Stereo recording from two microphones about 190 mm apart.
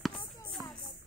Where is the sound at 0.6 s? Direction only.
20° right (ahead or behind).